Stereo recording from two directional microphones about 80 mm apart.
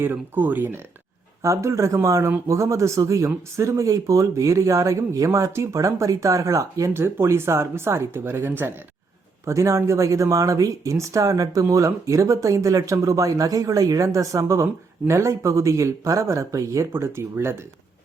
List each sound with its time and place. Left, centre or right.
0.0 s speech: right
1.4 s speech: right
16.9 s speech: right